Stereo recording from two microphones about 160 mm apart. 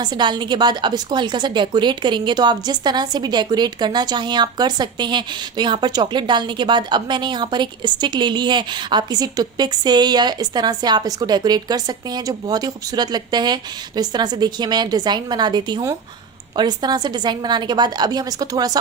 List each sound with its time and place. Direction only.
0.0 s a woman's voice: 30° right (ahead or behind)